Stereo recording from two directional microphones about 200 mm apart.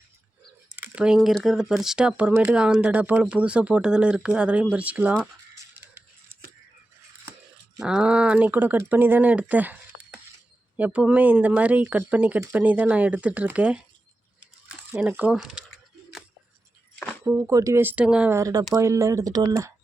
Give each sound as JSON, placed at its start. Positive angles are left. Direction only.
{"t": 0.8, "sound": "speech", "side_deg": -5}
{"t": 5.8, "sound": "scissors", "side_deg": -10}
{"t": 7.8, "sound": "speech", "side_deg": -5}
{"t": 17.2, "sound": "speech", "side_deg": -10}